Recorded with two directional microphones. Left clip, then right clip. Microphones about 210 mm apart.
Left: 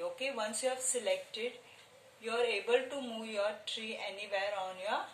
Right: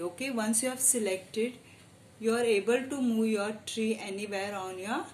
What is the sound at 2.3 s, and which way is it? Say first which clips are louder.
Speech: right 5 dB; 45° right (ahead or behind).